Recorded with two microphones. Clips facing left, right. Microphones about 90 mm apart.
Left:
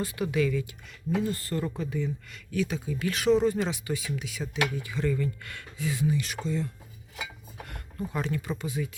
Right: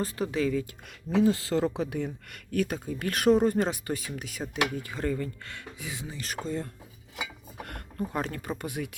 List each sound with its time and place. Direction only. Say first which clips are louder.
0.0 s speech: left 1 dB; 35° right (ahead or behind)
1.3 s speech: right 5 dB; 90° right; by 5.3 s 40° right (ahead or behind)
5.5 s speech: left 6 dB; 20° right (ahead or behind)
6.1 s speech: left 1 dB; 40° right (ahead or behind)
7.6 s a sound: right 3 dB; 50° right (ahead or behind)
8.1 s speech: left 3 dB; 45° right (ahead or behind)